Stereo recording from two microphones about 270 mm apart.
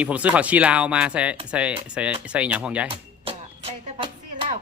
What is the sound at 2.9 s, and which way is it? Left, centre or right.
Music, right.